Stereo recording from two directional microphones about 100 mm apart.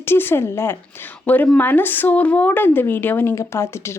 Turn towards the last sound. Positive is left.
turn(degrees=25)  # may be behind; listen again after turning